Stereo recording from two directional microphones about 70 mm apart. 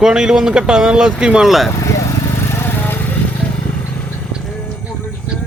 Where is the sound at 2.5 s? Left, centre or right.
Left.